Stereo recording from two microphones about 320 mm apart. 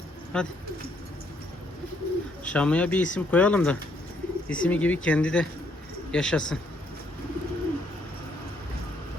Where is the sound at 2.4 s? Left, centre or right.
Centre.